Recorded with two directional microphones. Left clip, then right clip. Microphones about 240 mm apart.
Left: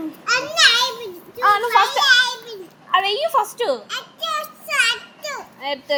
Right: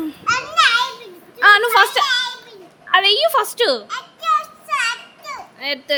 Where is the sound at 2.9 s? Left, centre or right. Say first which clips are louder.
Right 4 dB; right.